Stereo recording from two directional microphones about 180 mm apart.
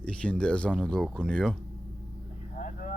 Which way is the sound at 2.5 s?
50° left (ahead or behind).